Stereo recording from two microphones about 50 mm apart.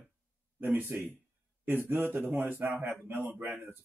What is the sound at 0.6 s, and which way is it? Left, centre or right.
Speech, right.